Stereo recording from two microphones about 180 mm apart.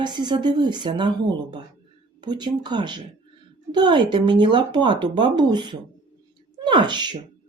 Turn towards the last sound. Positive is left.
turn(degrees=-25)  # may be behind; listen again after turning